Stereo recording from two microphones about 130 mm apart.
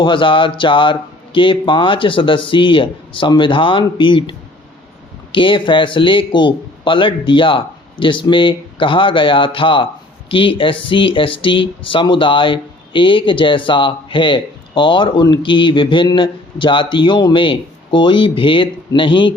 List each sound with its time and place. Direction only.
0.0 s a man's voice: 40° left (ahead or behind)